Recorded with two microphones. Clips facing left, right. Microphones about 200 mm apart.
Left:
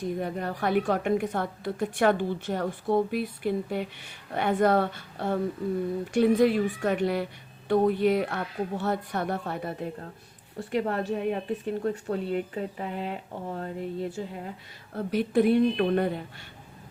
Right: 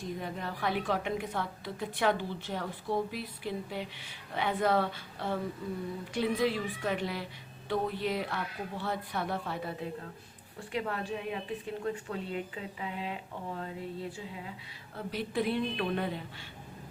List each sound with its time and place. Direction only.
0.2 s speech: 50° left (ahead or behind)